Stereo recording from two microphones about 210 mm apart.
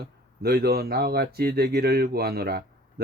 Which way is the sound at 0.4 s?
50° right (ahead or behind).